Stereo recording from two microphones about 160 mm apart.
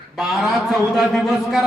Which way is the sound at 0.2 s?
Centre (ahead or behind).